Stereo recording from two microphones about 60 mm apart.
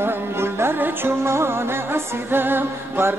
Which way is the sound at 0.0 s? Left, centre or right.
Right.